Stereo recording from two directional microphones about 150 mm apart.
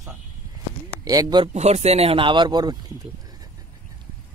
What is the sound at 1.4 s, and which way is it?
Speech, 45° right (ahead or behind).